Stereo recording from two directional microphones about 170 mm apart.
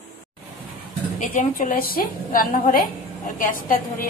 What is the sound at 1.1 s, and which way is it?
A woman's voice, 45° left (ahead or behind).